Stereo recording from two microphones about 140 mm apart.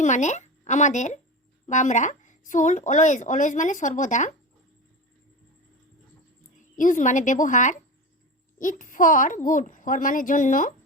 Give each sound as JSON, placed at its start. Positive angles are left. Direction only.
{"t": 0.0, "sound": "speech", "side_deg": 60}
{"t": 6.6, "sound": "a child's voice", "side_deg": 65}